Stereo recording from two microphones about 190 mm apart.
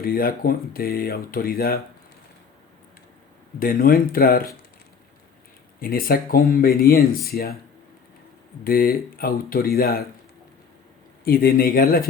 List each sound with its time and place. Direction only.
0.0 s speech: 50° left (ahead or behind)
3.6 s speech: 50° left (ahead or behind)
5.8 s speech: 50° left (ahead or behind)
8.6 s speech: 50° left (ahead or behind)
11.2 s speech: 50° left (ahead or behind)